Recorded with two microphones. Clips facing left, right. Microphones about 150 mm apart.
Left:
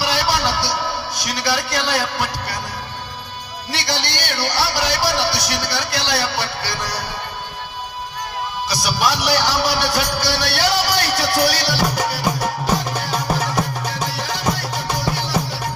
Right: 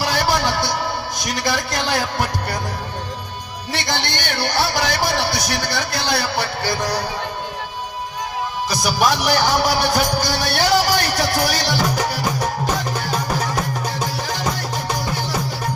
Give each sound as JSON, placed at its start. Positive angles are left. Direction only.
{"t": 0.0, "sound": "music", "side_deg": -50}
{"t": 3.7, "sound": "a man's voice", "side_deg": -50}
{"t": 8.7, "sound": "a man's voice", "side_deg": -50}
{"t": 14.2, "sound": "music", "side_deg": -45}